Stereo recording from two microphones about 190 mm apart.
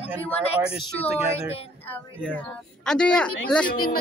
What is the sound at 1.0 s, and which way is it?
Speech, 35° left (ahead or behind).